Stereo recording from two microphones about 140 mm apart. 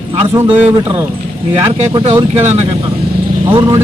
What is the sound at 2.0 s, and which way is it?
Speech, 45° right (ahead or behind).